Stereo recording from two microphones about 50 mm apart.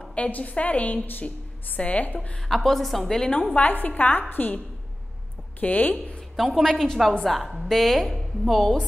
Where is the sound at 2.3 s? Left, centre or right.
Centre.